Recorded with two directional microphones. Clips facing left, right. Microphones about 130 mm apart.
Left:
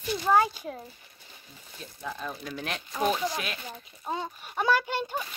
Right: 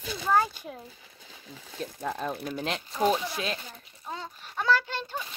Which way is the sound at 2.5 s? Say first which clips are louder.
Right 2 dB; 25° right (ahead or behind).